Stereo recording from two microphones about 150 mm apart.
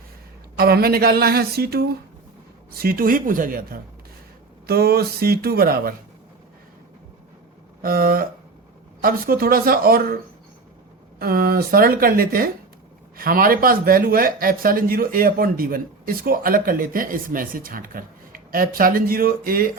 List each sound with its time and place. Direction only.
0.5 s speech: 90° right
2.7 s a man's voice: 80° right
4.6 s speech: 90° right
7.8 s a man's voice: 75° right (ahead or behind)
11.2 s a man's voice: 85° right